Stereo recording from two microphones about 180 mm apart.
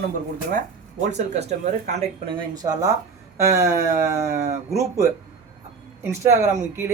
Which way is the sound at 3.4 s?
15° right (ahead or behind).